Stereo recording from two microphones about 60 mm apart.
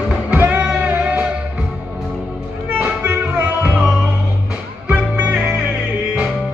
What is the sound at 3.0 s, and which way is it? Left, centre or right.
Music, right.